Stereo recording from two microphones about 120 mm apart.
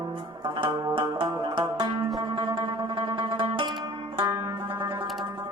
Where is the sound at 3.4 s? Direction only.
45° right (ahead or behind).